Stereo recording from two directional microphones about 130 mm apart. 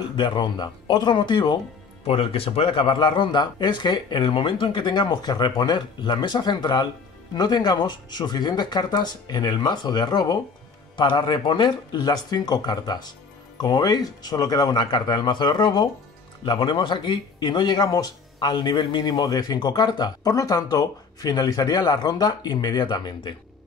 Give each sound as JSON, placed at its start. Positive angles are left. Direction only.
{"t": 0.1, "sound": "speech", "side_deg": 35}
{"t": 2.0, "sound": "speech", "side_deg": 50}